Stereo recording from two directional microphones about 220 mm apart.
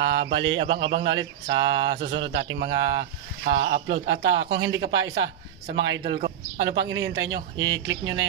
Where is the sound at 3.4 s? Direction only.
50° right (ahead or behind).